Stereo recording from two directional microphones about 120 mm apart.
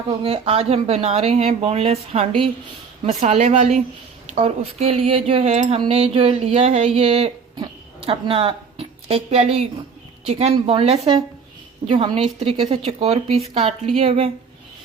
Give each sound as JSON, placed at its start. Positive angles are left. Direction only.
{"t": 0.2, "sound": "speech", "side_deg": -50}
{"t": 3.1, "sound": "speech", "side_deg": -80}
{"t": 4.4, "sound": "speech", "side_deg": -55}
{"t": 5.9, "sound": "speech", "side_deg": -55}
{"t": 7.5, "sound": "a sound", "side_deg": -40}
{"t": 10.2, "sound": "a woman's voice", "side_deg": -60}